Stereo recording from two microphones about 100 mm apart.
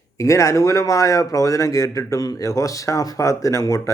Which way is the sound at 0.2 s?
30° left (ahead or behind).